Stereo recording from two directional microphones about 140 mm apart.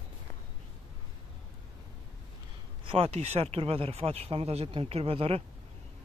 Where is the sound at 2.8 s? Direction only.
45° right (ahead or behind).